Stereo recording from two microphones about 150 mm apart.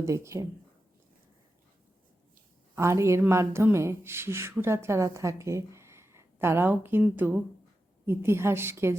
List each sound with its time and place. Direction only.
0.0 s speech: 20° right (ahead or behind)
2.7 s speech: 20° right (ahead or behind)